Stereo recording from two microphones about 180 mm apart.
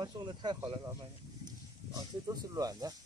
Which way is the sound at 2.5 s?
20° right (ahead or behind).